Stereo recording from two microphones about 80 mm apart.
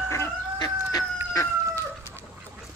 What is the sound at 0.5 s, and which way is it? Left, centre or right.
Chicken, left.